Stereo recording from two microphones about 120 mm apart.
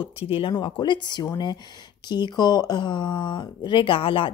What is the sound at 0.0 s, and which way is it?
Speech, 45° left (ahead or behind).